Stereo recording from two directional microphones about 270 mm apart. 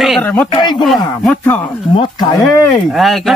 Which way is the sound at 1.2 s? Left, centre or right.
Centre.